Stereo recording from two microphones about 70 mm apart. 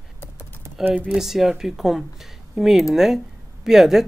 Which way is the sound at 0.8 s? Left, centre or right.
Right.